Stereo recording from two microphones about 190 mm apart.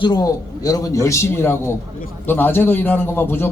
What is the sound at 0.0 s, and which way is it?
A man's voice, 20° left (ahead or behind).